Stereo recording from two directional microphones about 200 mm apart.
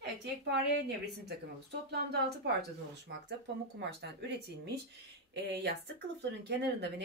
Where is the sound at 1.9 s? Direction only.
55° right (ahead or behind).